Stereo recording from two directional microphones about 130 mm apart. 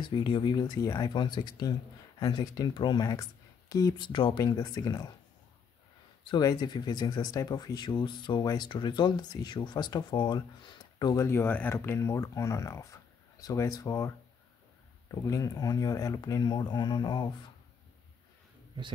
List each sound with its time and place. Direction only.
0.0 s speech: 40° left (ahead or behind)
6.2 s speech: 35° left (ahead or behind)
11.2 s speech: 15° left (ahead or behind); by 17.3 s 35° left (ahead or behind)